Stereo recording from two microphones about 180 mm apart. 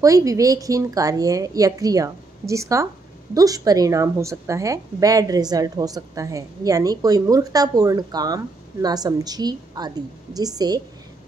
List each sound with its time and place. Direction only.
0.0 s a woman's voice: 20° right (ahead or behind)